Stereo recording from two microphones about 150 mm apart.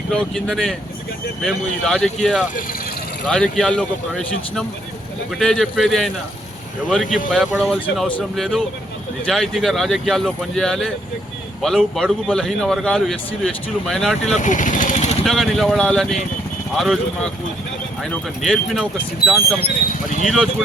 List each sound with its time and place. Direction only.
0.1 s a man's voice: 5° left (ahead or behind)
14.3 s vehicle: 60° left (ahead or behind)
15.2 s a man's voice: centre (ahead or behind)